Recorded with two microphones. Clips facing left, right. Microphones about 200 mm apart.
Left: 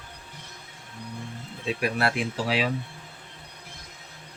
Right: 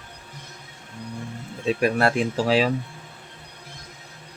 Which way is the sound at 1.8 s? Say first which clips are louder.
Right 5 dB; 45° right (ahead or behind).